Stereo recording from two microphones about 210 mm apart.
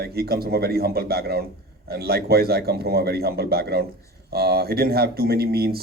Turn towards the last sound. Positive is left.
turn(degrees=-50)  # may be behind; listen again after turning